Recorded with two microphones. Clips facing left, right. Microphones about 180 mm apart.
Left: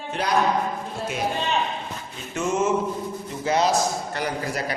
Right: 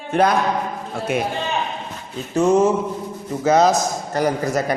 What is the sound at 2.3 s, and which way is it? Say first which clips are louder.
A man's voice: right 7 dB; 35° right (ahead or behind).